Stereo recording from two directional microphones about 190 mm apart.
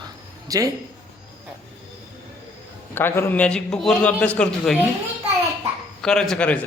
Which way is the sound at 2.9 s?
10° left (ahead or behind).